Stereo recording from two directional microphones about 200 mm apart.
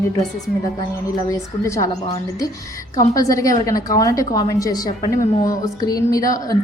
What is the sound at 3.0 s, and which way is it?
A woman's voice, 15° left (ahead or behind).